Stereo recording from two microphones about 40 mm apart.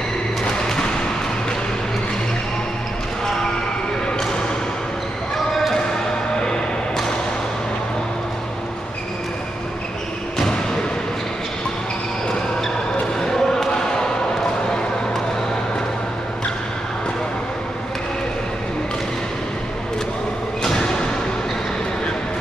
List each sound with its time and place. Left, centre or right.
5.5 s basketball bounce: centre
13.2 s basketball bounce: centre
20.6 s thump: centre